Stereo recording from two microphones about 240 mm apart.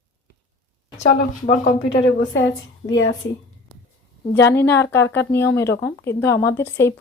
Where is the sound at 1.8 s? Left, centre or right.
Left.